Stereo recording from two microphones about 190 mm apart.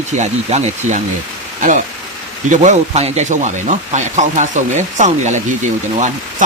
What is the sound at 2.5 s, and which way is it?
Speech, 40° right (ahead or behind).